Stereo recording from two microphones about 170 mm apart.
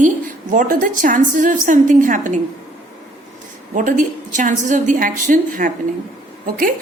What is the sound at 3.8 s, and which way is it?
A woman's voice, 50° right (ahead or behind).